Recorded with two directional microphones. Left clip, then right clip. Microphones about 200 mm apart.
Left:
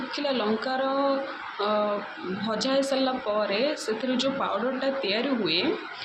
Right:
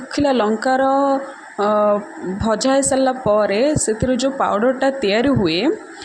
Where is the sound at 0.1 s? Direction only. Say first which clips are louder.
Right 11 dB; 45° right (ahead or behind).